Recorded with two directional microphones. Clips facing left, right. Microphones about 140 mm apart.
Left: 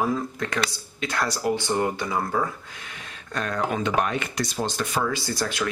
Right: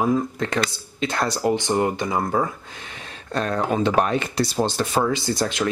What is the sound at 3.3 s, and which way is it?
Speech, 30° right (ahead or behind).